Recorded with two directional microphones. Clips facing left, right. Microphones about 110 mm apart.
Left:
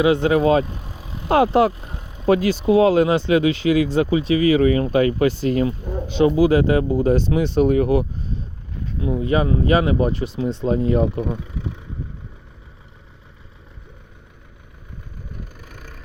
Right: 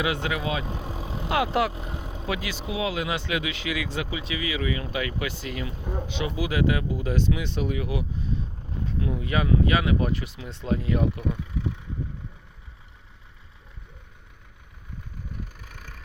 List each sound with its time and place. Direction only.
0.0 s speech: 30° left (ahead or behind)
0.6 s vehicle: 25° right (ahead or behind)
1.3 s speech: 35° left (ahead or behind)
1.7 s vehicle: 25° right (ahead or behind)
2.2 s speech: 40° left (ahead or behind)
9.0 s speech: 25° left (ahead or behind)